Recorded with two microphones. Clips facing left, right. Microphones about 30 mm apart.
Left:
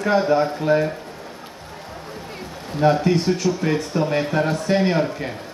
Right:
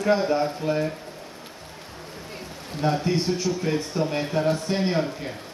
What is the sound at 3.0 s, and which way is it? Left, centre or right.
Speech, left.